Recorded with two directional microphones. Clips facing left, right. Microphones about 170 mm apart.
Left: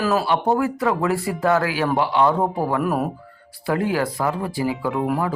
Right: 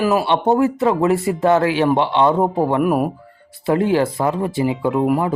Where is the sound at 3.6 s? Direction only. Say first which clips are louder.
Right 5 dB; 25° right (ahead or behind).